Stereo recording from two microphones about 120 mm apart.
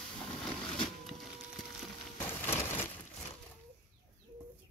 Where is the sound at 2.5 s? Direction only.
20° left (ahead or behind).